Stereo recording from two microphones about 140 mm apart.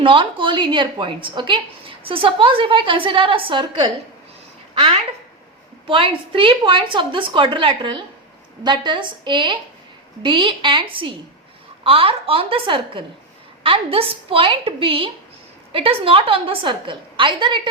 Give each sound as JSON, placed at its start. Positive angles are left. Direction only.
{"t": 0.0, "sound": "a woman's voice", "side_deg": -35}
{"t": 5.9, "sound": "a woman's voice", "side_deg": -40}